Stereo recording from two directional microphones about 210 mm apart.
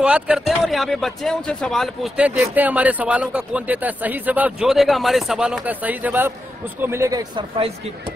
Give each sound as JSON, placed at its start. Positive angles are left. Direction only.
{"t": 0.0, "sound": "speech", "side_deg": -5}